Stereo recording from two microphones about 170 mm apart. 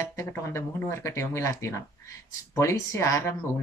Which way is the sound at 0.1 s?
20° left (ahead or behind).